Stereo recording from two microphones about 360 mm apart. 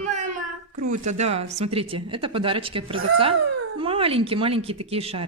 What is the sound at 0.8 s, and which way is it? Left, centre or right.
A woman's voice, centre.